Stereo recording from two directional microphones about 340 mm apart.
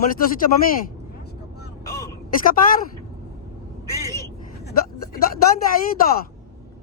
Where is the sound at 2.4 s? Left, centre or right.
Left.